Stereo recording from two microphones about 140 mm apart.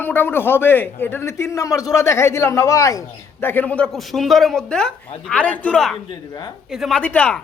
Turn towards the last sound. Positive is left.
turn(degrees=10)  # may be behind; listen again after turning